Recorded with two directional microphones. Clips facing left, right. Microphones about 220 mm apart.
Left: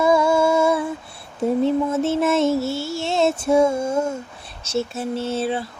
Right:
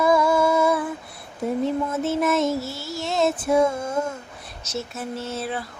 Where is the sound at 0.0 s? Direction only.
25° left (ahead or behind).